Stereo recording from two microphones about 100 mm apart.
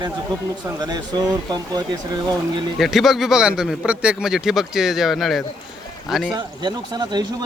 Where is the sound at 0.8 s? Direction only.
45° right (ahead or behind).